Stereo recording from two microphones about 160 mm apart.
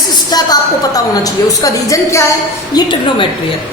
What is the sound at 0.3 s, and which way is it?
A woman's voice, 25° left (ahead or behind).